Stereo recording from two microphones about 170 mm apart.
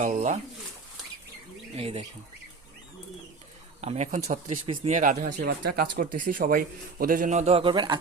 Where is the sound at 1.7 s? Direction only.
35° right (ahead or behind).